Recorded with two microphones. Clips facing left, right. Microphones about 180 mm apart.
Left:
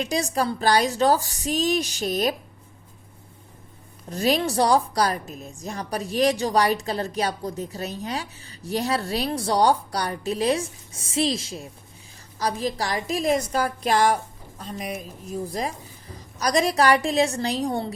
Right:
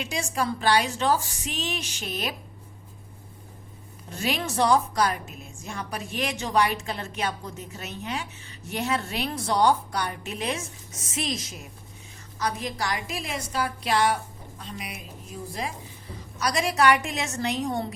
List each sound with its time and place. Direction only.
0.0 s a woman's voice: 35° left (ahead or behind)
4.1 s a woman's voice: 35° left (ahead or behind)